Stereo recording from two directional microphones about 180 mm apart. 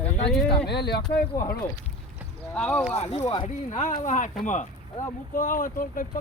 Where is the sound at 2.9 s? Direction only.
40° left (ahead or behind).